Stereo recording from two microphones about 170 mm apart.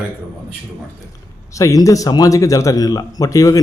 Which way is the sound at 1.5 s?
20° left (ahead or behind).